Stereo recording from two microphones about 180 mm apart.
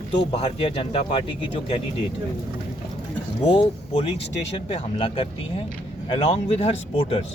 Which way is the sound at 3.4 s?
30° left (ahead or behind).